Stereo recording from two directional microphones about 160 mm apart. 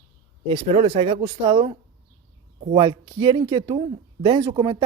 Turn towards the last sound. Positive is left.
turn(degrees=-30)  # may be behind; listen again after turning